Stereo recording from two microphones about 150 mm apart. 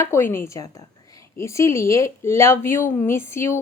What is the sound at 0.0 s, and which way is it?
Speech, 15° left (ahead or behind).